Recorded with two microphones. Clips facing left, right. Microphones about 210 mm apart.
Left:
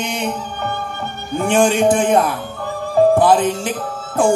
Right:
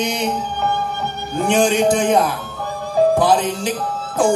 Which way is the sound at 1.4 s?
55° left (ahead or behind).